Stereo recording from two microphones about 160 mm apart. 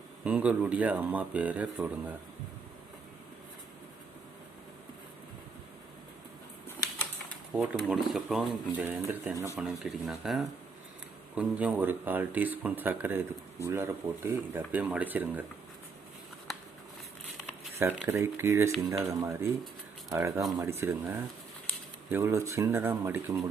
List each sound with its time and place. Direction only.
0.3 s speech: 10° right (ahead or behind)
7.5 s speech: 10° right (ahead or behind)
18.1 s speech: 15° right (ahead or behind)